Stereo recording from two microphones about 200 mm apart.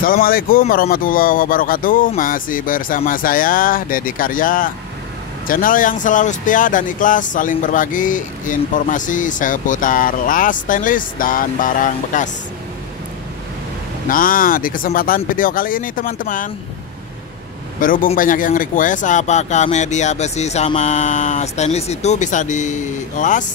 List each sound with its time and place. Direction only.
0.0 s speech: 45° left (ahead or behind)
14.0 s speech: 45° left (ahead or behind)
17.7 s speech: 40° left (ahead or behind)